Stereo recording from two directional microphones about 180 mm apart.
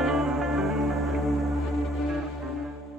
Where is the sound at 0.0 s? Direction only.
Centre (ahead or behind).